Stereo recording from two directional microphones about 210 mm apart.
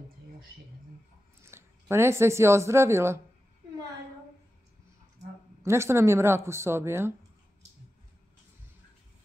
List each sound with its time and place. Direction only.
1.4 s speech: 10° right (ahead or behind)
5.6 s speech: 10° right (ahead or behind)